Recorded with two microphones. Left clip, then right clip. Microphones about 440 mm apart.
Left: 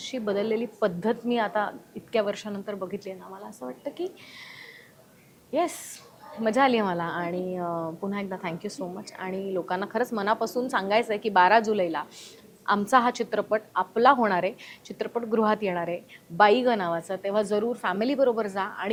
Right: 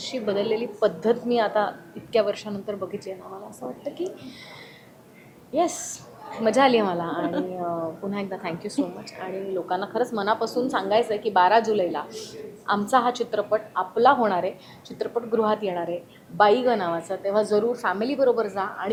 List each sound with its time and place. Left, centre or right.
0.0 s a woman's voice: left
5.5 s a woman's voice: left